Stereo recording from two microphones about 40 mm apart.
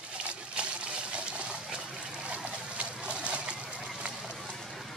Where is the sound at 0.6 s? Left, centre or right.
Right.